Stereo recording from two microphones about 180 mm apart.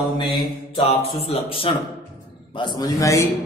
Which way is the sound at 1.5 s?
30° left (ahead or behind).